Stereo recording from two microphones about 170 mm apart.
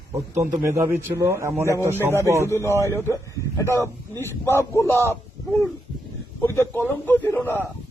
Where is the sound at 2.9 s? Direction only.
15° left (ahead or behind).